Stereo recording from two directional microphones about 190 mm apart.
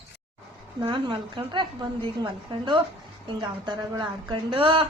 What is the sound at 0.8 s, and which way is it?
A woman's voice, 25° right (ahead or behind).